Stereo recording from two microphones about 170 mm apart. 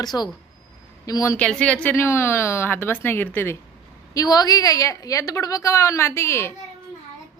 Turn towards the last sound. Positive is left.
turn(degrees=15)  # may be behind; listen again after turning